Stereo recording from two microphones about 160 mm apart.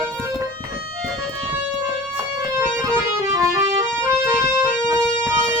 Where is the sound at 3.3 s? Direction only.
25° right (ahead or behind).